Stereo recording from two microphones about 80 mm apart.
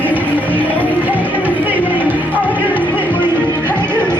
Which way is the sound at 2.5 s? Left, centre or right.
Right.